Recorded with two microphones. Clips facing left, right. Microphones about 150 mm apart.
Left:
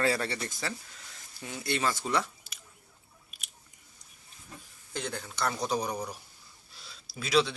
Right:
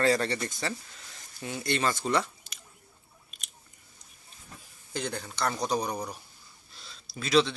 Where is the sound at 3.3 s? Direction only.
5° left (ahead or behind).